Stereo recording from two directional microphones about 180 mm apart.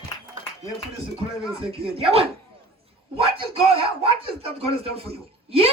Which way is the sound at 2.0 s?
30° right (ahead or behind).